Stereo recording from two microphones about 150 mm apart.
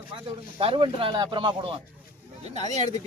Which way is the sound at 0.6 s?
40° right (ahead or behind).